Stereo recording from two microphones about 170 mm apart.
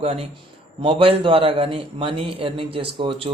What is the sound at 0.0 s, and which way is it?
Speech, 35° right (ahead or behind).